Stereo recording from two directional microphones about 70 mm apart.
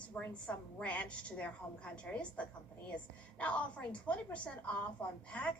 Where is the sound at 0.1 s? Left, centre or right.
Centre.